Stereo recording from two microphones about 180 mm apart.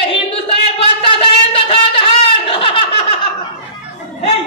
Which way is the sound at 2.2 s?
30° left (ahead or behind).